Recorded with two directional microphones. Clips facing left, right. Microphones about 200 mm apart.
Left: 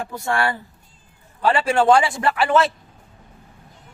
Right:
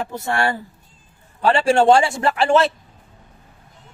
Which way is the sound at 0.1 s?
25° right (ahead or behind).